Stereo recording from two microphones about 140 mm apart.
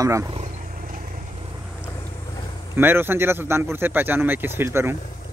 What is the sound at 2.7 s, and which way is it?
Speech, 15° right (ahead or behind).